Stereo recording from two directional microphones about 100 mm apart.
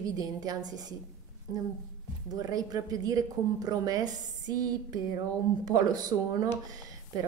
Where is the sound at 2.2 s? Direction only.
40° right (ahead or behind).